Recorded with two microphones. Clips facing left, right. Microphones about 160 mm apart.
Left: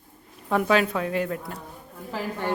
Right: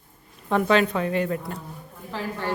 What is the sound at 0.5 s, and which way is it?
A woman's voice, 5° left (ahead or behind).